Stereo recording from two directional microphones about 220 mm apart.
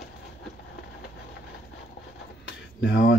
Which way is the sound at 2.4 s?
50° left (ahead or behind).